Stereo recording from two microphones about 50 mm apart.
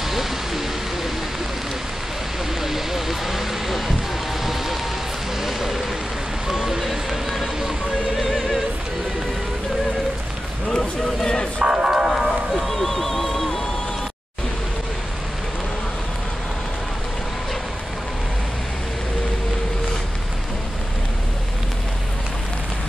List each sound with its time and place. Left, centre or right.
0.0 s a sound: centre
2.6 s a sound: centre
5.4 s speech: centre
8.2 s music: centre
10.7 s speech: centre
11.6 s music: centre
12.1 s music: centre